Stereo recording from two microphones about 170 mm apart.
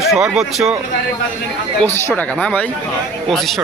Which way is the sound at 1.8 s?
10° left (ahead or behind).